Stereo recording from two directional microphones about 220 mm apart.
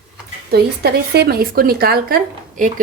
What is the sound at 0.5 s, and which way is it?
A woman's voice, 45° right (ahead or behind).